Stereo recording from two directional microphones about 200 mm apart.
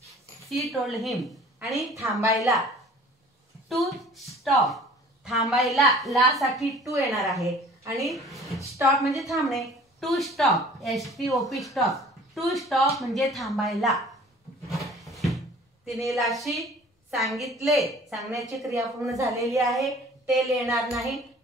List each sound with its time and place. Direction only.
0.7 s a woman's voice: centre (ahead or behind)
3.6 s a woman's voice: centre (ahead or behind)
7.8 s speech: 15° right (ahead or behind)
8.1 s a woman's voice: centre (ahead or behind)
14.7 s a sound: centre (ahead or behind)
18.1 s a woman's voice: centre (ahead or behind)
18.7 s a woman's voice: 15° right (ahead or behind)
19.6 s a woman's voice: centre (ahead or behind)